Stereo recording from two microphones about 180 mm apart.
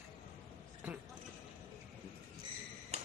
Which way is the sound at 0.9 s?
10° right (ahead or behind).